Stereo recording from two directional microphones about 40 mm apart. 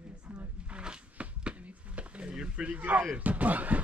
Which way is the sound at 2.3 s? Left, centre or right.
Right.